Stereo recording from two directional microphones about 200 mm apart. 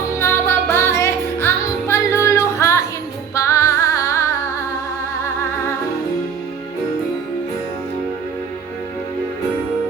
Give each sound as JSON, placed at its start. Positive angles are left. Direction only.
{"t": 0.2, "sound": "music", "side_deg": 10}